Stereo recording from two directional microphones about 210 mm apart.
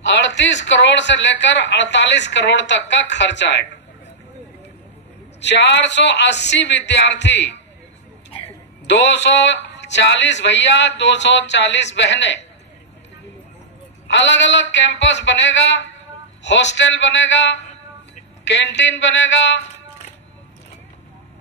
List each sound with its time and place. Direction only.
0.0 s speech: 60° left (ahead or behind)
5.4 s speech: 55° left (ahead or behind)
8.8 s speech: 55° left (ahead or behind)
14.0 s speech: 60° left (ahead or behind)